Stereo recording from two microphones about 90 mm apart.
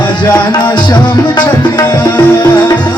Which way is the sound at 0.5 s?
55° left (ahead or behind).